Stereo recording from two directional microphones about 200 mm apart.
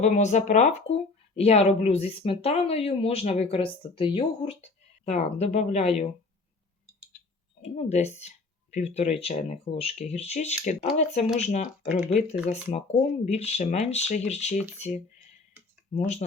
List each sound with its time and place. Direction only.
0.0 s speech: 35° left (ahead or behind)
7.8 s speech: 35° left (ahead or behind)
12.7 s speech: 35° left (ahead or behind)